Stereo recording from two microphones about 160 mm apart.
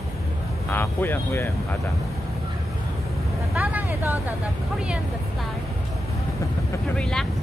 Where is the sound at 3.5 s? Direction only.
10° right (ahead or behind).